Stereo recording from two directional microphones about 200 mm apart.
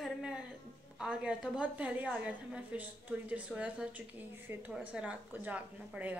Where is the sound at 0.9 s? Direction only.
5° right (ahead or behind).